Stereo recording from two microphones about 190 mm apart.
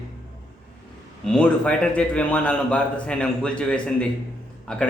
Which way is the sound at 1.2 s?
5° left (ahead or behind).